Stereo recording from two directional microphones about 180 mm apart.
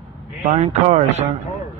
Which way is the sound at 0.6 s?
40° right (ahead or behind).